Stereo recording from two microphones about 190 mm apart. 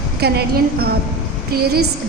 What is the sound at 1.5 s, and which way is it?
Speech, 55° right (ahead or behind).